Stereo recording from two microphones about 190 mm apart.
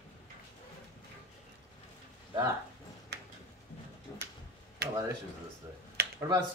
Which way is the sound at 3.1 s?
60° right (ahead or behind).